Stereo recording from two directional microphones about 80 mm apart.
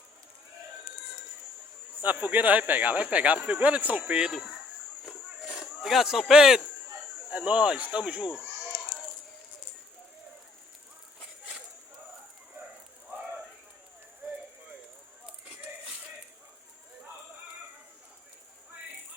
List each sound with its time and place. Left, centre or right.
2.0 s speech: right
4.3 s speech: centre
5.8 s speech: centre
7.3 s speech: centre